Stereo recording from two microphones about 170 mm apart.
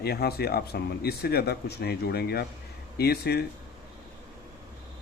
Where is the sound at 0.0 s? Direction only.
65° left (ahead or behind).